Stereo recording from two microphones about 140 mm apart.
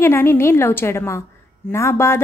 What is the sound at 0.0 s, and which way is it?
Speech, 15° left (ahead or behind).